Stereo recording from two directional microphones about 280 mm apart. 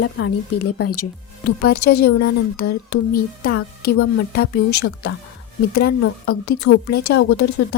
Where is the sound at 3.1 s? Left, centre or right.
Left.